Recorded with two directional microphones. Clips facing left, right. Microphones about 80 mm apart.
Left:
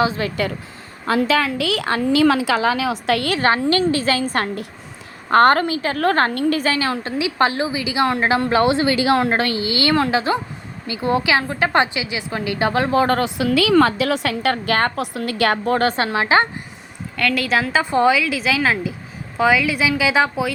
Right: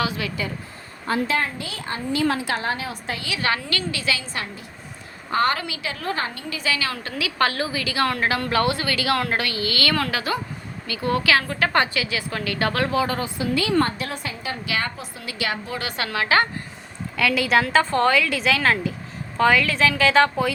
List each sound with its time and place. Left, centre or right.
0.0 s a woman's voice: left
1.0 s a woman's voice: left
3.2 s a woman's voice: left
3.5 s a woman's voice: left
6.0 s a woman's voice: left
13.1 s a woman's voice: left
16.0 s a woman's voice: left
17.2 s a woman's voice: centre